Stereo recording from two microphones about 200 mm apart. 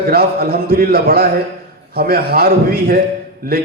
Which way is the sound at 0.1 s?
50° right (ahead or behind).